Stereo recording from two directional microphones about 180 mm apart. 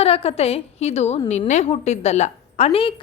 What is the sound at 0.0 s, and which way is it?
A woman's voice, 35° left (ahead or behind).